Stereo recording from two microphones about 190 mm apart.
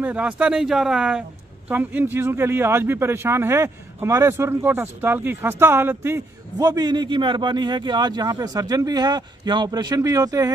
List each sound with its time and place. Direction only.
0.0 s speech: 10° right (ahead or behind)